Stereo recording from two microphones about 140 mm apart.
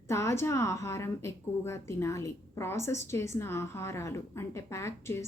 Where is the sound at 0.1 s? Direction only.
20° left (ahead or behind).